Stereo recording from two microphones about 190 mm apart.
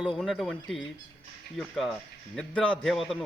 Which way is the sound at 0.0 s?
5° right (ahead or behind).